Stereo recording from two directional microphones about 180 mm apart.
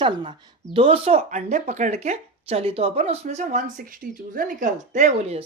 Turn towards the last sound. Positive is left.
turn(degrees=-35)  # may be behind; listen again after turning